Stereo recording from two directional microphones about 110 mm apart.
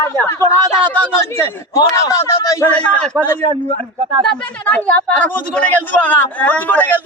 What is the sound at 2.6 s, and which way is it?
Speech, 15° left (ahead or behind).